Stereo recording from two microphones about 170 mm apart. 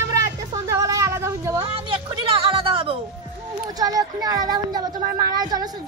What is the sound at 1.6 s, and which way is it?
Music, 30° right (ahead or behind).